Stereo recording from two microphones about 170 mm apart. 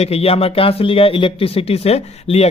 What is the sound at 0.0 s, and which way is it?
Speech, 35° left (ahead or behind).